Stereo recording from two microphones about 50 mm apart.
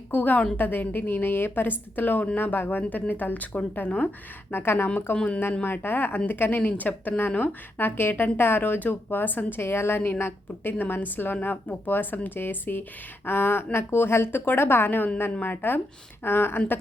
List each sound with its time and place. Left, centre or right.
0.1 s a woman's voice: left
4.5 s a woman's voice: left
5.1 s speech: left
5.6 s a woman's voice: left